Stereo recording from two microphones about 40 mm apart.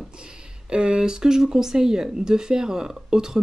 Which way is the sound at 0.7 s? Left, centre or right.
Right.